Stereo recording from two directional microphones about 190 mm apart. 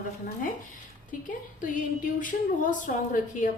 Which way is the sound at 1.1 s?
45° left (ahead or behind).